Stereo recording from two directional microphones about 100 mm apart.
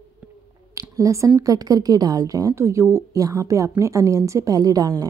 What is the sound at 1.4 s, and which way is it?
A woman's voice, 35° right (ahead or behind).